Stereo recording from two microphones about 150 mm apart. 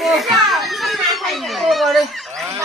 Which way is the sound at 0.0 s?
Centre (ahead or behind).